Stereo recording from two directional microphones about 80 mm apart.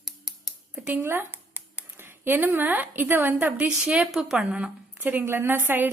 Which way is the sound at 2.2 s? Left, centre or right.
Right.